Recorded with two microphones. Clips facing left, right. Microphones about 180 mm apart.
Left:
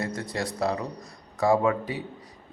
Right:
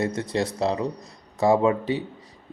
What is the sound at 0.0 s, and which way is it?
Speech, 25° right (ahead or behind).